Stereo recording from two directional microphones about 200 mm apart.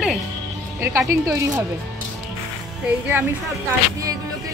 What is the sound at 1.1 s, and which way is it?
Speech, 15° right (ahead or behind).